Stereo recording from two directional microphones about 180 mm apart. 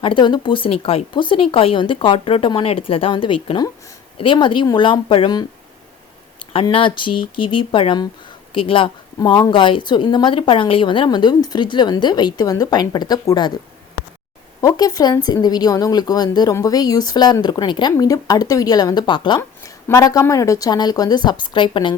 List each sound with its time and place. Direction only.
0.0 s speech: 25° left (ahead or behind)
6.5 s speech: 30° left (ahead or behind)
14.6 s speech: 20° left (ahead or behind)